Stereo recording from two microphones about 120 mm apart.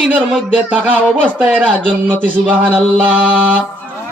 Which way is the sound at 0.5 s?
10° right (ahead or behind).